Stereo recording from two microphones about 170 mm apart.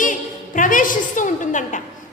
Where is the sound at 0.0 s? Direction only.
50° left (ahead or behind).